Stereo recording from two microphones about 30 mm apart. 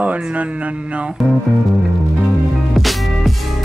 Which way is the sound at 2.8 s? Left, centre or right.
Centre.